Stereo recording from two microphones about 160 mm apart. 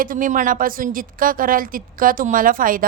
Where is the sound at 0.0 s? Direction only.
60° right (ahead or behind).